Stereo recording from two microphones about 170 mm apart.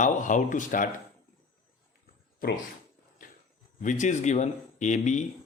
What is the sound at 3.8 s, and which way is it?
Speech, 45° left (ahead or behind).